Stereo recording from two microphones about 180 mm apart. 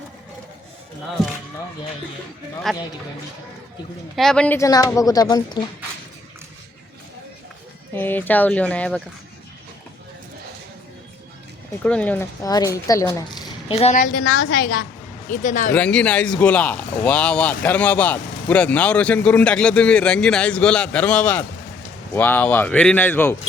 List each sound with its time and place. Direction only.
2.7 s a man's voice: centre (ahead or behind)
4.1 s speech: centre (ahead or behind); by 5.6 s 20° left (ahead or behind)
7.9 s speech: 10° left (ahead or behind)
11.8 s speech: 5° left (ahead or behind)
13.7 s a woman's voice: 35° left (ahead or behind)
14.1 s a woman's voice: 90° left
15.3 s speech: 45° left (ahead or behind)
15.7 s speech: 5° left (ahead or behind)